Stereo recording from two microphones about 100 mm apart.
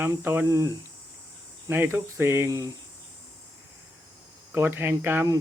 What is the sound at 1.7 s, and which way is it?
Speech, 25° right (ahead or behind).